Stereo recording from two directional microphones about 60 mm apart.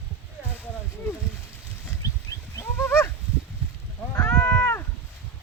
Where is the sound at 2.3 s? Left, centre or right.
Left.